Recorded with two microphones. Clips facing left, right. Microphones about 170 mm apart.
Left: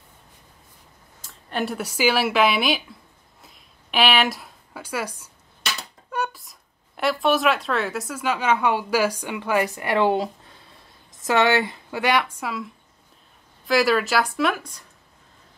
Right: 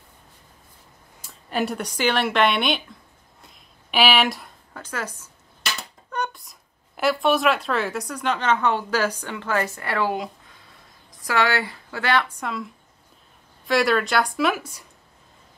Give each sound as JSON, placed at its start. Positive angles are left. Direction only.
{"t": 1.2, "sound": "speech", "side_deg": 0}
{"t": 3.4, "sound": "a sound", "side_deg": 0}
{"t": 7.0, "sound": "a woman's voice", "side_deg": 0}